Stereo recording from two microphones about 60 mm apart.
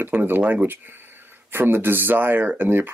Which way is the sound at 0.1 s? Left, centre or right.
Right.